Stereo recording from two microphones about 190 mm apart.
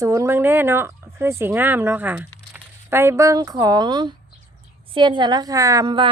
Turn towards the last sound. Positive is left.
turn(degrees=-25)  # may be behind; listen again after turning